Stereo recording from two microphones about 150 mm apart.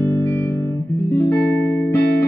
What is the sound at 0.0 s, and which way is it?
Music, 15° left (ahead or behind).